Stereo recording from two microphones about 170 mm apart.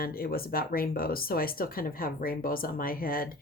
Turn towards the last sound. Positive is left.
turn(degrees=60)  # may be behind; listen again after turning